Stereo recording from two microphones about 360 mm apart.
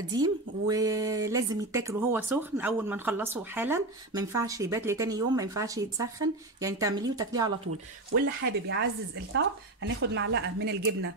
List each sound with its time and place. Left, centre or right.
0.0 s speech: centre
8.1 s a woman's voice: right